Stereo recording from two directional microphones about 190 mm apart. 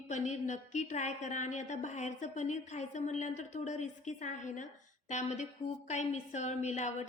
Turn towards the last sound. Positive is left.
turn(degrees=40)  # may be behind; listen again after turning